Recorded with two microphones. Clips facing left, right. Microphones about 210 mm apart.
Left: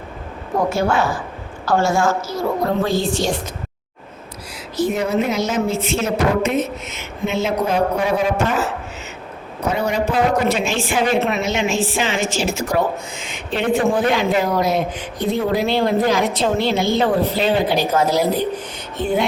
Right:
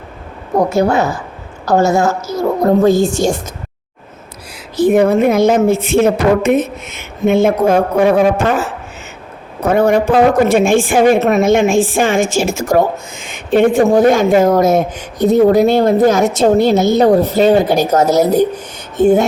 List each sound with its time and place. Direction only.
0.9 s a woman's voice: 40° right (ahead or behind)
4.8 s a woman's voice: 55° right (ahead or behind)
9.6 s a woman's voice: 50° right (ahead or behind)